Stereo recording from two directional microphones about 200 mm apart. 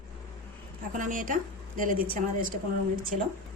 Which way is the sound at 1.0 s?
40° right (ahead or behind).